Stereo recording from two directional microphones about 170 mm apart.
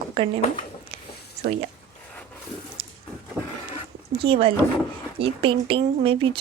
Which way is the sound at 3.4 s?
10° right (ahead or behind).